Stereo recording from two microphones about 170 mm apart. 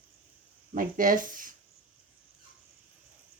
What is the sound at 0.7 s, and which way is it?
Speech, 55° right (ahead or behind).